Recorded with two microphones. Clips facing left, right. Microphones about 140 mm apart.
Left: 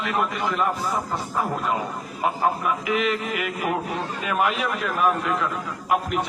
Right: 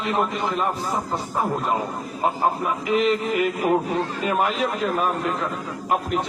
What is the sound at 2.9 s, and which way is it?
A man's voice, 35° right (ahead or behind).